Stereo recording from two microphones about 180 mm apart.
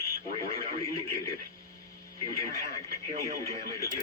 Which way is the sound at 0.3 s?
30° right (ahead or behind).